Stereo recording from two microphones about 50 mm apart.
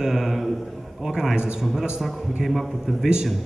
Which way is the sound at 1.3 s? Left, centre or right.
Centre.